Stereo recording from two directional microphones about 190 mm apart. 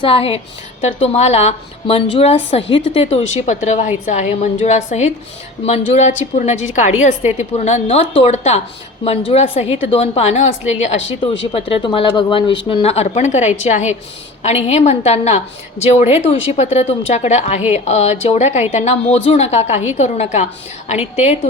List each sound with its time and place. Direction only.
0.0 s a woman's voice: 30° left (ahead or behind)
11.5 s a woman's voice: 25° left (ahead or behind)